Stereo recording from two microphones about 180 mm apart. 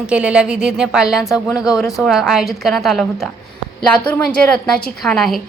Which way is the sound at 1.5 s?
20° left (ahead or behind).